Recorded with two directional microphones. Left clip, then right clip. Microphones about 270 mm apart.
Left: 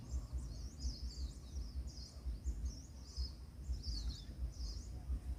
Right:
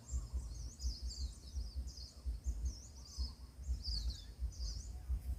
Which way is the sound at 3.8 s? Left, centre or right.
Left.